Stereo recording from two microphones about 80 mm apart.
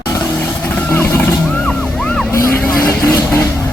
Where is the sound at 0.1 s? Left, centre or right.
Centre.